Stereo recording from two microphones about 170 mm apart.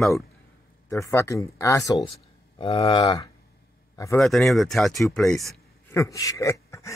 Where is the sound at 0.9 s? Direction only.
15° left (ahead or behind).